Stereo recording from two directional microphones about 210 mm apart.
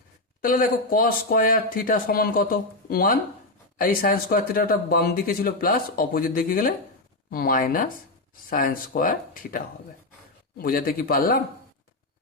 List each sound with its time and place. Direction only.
0.4 s speech: 40° left (ahead or behind)